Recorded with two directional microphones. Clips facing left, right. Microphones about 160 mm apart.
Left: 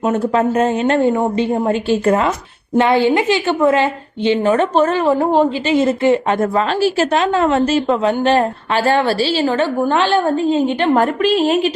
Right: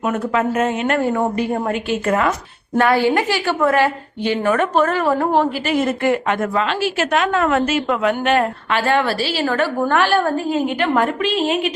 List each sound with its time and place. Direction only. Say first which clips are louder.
0.0 s a woman's voice: left 4 dB; 30° left (ahead or behind)